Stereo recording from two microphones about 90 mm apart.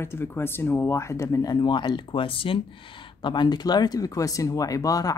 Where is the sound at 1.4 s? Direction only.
55° left (ahead or behind); by 2.5 s 80° left.